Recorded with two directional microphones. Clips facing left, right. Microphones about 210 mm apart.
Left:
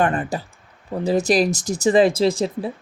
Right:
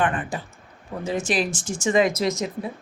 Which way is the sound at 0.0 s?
40° left (ahead or behind).